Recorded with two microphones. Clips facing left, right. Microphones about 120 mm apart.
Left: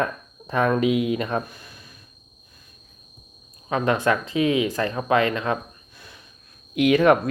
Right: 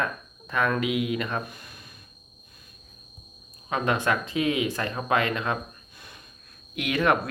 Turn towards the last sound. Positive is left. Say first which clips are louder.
# left 7 dB
turn(degrees=40)  # may be behind; listen again after turning